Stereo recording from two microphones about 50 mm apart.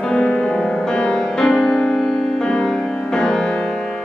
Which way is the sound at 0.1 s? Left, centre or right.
Centre.